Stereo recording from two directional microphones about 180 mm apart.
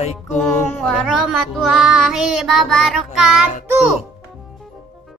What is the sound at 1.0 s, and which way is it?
Child singing, 5° right (ahead or behind).